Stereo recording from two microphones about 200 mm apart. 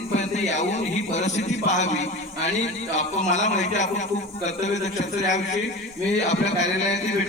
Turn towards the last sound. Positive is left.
turn(degrees=35)  # may be behind; listen again after turning